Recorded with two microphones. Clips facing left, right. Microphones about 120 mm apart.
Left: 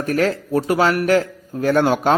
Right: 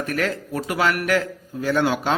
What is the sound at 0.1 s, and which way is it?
Speech, 35° left (ahead or behind).